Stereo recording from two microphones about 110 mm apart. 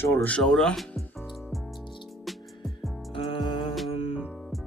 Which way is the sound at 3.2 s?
50° left (ahead or behind).